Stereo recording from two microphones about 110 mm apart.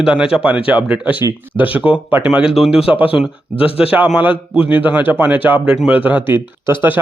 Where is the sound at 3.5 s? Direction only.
60° left (ahead or behind).